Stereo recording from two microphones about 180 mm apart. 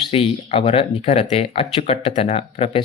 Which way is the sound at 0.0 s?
30° left (ahead or behind).